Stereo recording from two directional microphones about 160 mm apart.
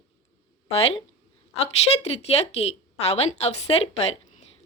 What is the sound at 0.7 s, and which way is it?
A woman's voice, 40° left (ahead or behind).